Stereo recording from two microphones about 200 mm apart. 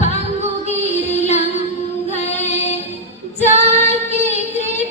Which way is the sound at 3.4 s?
35° left (ahead or behind).